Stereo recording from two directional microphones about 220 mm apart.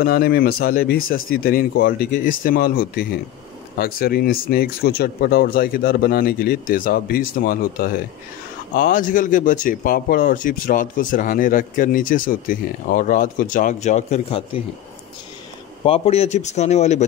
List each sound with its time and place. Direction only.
0.0 s speech: 45° left (ahead or behind); by 14.6 s 30° left (ahead or behind)
15.8 s speech: 25° left (ahead or behind)